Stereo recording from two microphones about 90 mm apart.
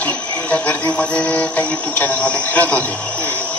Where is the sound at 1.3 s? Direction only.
20° left (ahead or behind).